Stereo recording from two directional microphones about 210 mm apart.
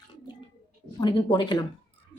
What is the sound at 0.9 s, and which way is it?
Speech, 20° left (ahead or behind).